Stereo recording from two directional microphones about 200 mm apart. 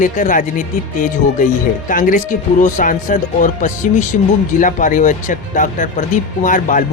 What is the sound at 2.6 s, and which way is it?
Speech, 40° left (ahead or behind).